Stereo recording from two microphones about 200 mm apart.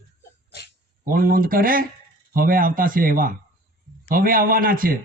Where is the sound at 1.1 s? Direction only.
45° right (ahead or behind).